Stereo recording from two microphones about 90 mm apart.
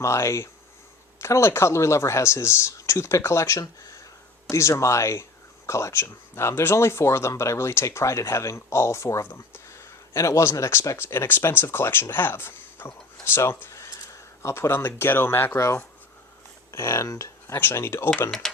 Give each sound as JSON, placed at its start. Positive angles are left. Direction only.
{"t": 0.0, "sound": "speech", "side_deg": 30}
{"t": 9.6, "sound": "a sound", "side_deg": 30}
{"t": 10.2, "sound": "speech", "side_deg": 35}
{"t": 16.7, "sound": "speech", "side_deg": 30}
{"t": 18.3, "sound": "speech", "side_deg": 5}